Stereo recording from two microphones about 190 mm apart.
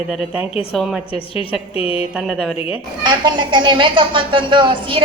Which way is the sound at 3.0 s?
25° right (ahead or behind).